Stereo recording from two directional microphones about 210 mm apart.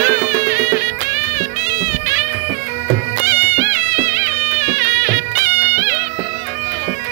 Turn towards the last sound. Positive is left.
turn(degrees=40)  # may be behind; listen again after turning